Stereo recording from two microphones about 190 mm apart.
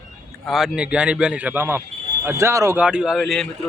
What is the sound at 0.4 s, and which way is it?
A man's voice, centre (ahead or behind).